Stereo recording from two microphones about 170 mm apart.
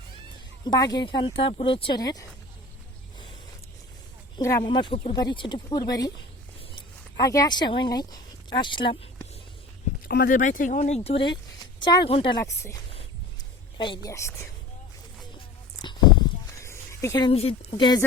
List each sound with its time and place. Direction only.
0.6 s speech: 25° left (ahead or behind)
4.4 s speech: 20° left (ahead or behind)
10.1 s speech: 60° left (ahead or behind); by 12.5 s 25° left (ahead or behind)
13.7 s speech: 30° left (ahead or behind)
14.1 s a woman's voice: 15° left (ahead or behind)
15.8 s a sound: 25° left (ahead or behind)
17.2 s speech: 35° left (ahead or behind)